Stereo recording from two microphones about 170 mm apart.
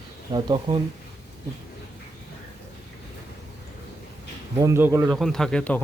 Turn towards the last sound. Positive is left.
turn(degrees=5)  # may be behind; listen again after turning